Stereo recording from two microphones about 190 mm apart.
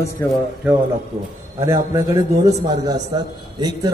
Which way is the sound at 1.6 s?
15° right (ahead or behind).